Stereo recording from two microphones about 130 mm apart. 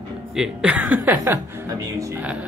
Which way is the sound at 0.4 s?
5° right (ahead or behind).